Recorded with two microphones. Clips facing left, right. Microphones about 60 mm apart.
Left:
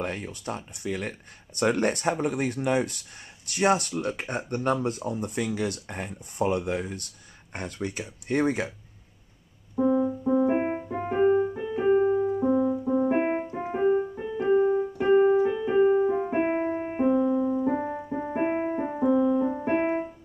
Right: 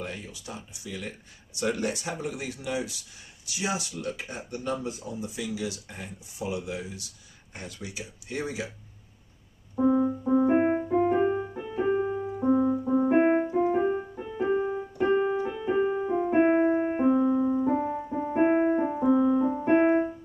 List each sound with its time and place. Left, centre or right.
0.0 s speech: left
9.8 s music: centre
11.0 s music: centre
11.4 s music: centre
11.9 s keyboard: centre
12.2 s keyboard: centre
13.6 s music: centre
13.8 s music: centre
14.5 s keyboard: centre
17.2 s keyboard: centre
17.6 s music: centre
19.0 s music: centre
19.5 s music: centre